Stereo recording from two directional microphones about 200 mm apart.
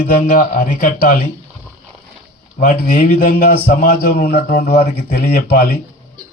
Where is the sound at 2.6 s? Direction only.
40° left (ahead or behind).